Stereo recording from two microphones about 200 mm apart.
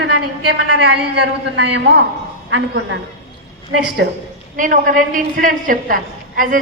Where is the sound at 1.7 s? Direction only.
60° right (ahead or behind).